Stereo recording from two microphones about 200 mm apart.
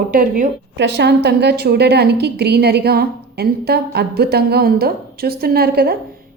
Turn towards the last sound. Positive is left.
turn(degrees=-50)  # may be behind; listen again after turning